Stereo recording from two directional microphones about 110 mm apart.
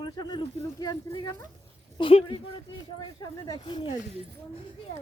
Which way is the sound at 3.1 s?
40° left (ahead or behind).